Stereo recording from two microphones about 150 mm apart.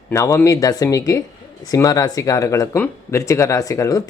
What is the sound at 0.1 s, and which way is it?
Speech, 20° left (ahead or behind).